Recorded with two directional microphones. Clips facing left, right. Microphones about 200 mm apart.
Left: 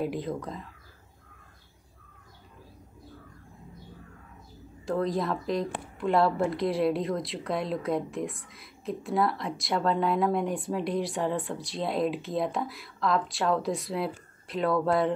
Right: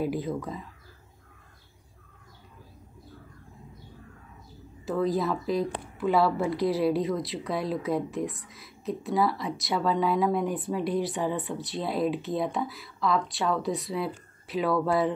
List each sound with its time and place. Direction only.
0.0 s speech: centre (ahead or behind)
4.8 s speech: centre (ahead or behind)